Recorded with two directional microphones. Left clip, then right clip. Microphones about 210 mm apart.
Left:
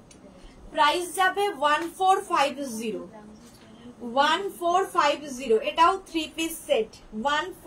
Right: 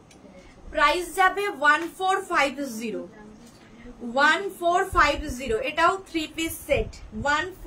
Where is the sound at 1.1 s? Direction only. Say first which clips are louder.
Right 2 dB; 20° right (ahead or behind).